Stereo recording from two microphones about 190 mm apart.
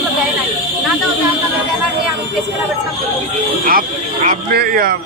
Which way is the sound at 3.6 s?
50° right (ahead or behind).